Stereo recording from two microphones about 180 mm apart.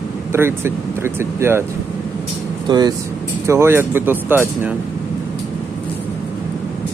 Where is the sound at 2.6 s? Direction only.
25° right (ahead or behind).